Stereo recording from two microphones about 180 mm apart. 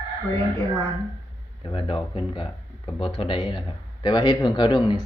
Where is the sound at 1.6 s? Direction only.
30° left (ahead or behind).